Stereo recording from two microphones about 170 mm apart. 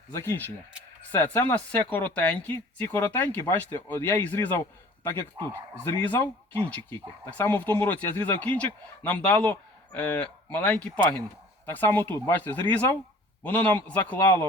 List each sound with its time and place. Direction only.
0.1 s speech: 15° left (ahead or behind)
5.4 s speech: 30° right (ahead or behind)
5.8 s speech: 10° left (ahead or behind)